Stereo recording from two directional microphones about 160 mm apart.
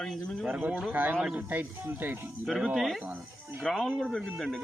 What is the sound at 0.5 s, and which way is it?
Speech, 5° right (ahead or behind).